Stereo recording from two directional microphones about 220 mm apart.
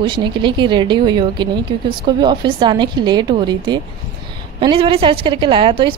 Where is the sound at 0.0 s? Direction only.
20° right (ahead or behind).